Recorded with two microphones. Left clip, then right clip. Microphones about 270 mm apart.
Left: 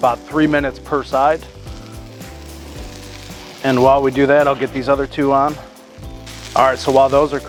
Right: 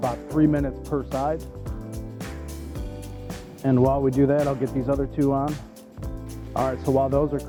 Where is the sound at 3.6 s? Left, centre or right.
Centre.